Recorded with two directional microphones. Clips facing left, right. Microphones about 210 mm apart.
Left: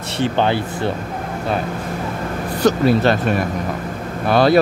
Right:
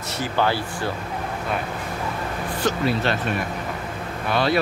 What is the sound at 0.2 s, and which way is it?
Speech, 20° left (ahead or behind).